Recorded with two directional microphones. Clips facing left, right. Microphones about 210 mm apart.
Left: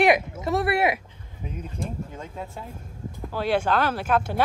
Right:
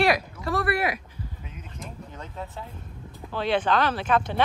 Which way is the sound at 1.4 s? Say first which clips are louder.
Left 8 dB; 40° left (ahead or behind).